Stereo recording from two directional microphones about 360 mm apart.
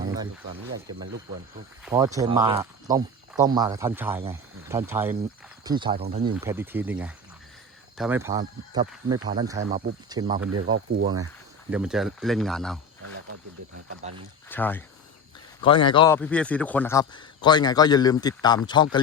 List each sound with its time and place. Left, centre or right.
1.8 s speech: centre
6.3 s speech: centre
10.5 s speech: right
11.7 s speech: centre
14.5 s speech: centre